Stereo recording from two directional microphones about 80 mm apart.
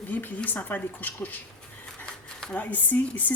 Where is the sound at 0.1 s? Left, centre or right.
Left.